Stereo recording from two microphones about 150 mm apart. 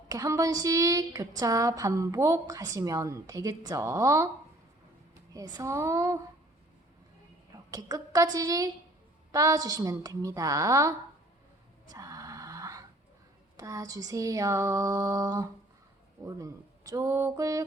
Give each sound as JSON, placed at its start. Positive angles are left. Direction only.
{"t": 0.1, "sound": "a woman's voice", "side_deg": -25}
{"t": 5.3, "sound": "a woman's voice", "side_deg": -20}
{"t": 7.7, "sound": "a woman's voice", "side_deg": -25}
{"t": 11.9, "sound": "a sound", "side_deg": -25}
{"t": 13.6, "sound": "a woman's voice", "side_deg": -25}